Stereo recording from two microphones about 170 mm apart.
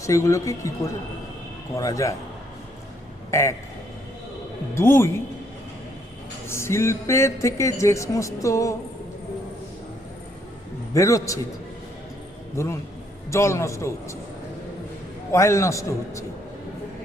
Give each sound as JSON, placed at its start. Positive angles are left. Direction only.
{"t": 0.0, "sound": "speech", "side_deg": 20}
{"t": 1.7, "sound": "speech", "side_deg": 20}
{"t": 3.3, "sound": "speech", "side_deg": 15}
{"t": 4.7, "sound": "speech", "side_deg": 15}
{"t": 6.5, "sound": "speech", "side_deg": 15}
{"t": 10.9, "sound": "speech", "side_deg": 20}
{"t": 12.6, "sound": "speech", "side_deg": 15}
{"t": 15.3, "sound": "speech", "side_deg": 15}